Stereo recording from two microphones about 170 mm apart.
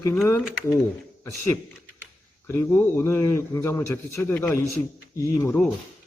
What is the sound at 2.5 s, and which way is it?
A man's voice, 15° left (ahead or behind).